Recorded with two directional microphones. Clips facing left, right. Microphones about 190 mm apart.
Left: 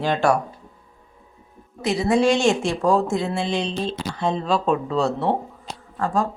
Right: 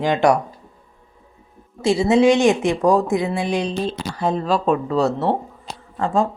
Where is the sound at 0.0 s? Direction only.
15° right (ahead or behind).